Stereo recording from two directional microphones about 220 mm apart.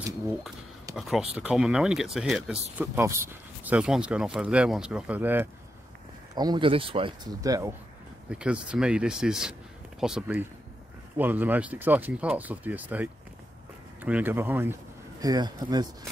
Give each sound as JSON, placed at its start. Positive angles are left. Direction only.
{"t": 0.9, "sound": "speech", "side_deg": 0}
{"t": 6.3, "sound": "speech", "side_deg": -20}
{"t": 8.3, "sound": "speech", "side_deg": -5}